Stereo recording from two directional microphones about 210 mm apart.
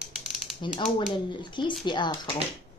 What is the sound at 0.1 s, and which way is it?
Mechanisms, centre (ahead or behind).